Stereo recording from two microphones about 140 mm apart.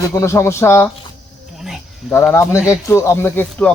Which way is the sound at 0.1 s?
20° left (ahead or behind).